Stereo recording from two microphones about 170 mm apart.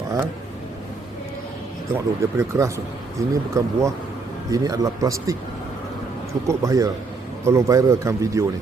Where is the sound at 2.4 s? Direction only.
15° right (ahead or behind).